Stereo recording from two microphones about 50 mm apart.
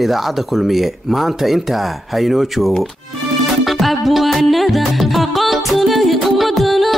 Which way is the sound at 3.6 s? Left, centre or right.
Centre.